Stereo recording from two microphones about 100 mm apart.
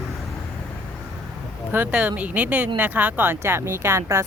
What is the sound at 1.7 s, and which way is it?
Speech, 20° right (ahead or behind).